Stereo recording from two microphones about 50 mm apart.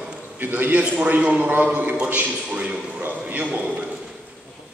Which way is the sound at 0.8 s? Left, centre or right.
Right.